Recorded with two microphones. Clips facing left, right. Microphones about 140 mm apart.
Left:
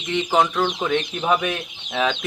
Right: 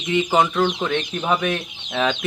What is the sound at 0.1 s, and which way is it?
Speech, 5° right (ahead or behind).